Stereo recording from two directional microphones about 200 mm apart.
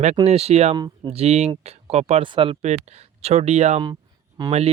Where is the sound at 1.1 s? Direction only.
30° right (ahead or behind).